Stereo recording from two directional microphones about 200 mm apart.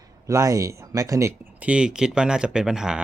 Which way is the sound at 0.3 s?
15° right (ahead or behind).